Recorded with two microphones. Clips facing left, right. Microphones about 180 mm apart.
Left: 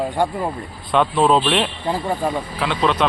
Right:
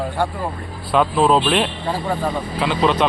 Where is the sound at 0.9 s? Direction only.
5° right (ahead or behind).